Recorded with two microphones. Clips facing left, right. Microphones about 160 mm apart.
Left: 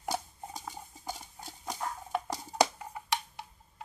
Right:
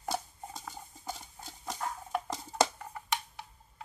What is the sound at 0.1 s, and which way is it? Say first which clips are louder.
Dishes: even; 5° left (ahead or behind).